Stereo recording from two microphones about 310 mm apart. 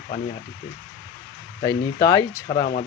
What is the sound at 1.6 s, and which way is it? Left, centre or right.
Speech, centre.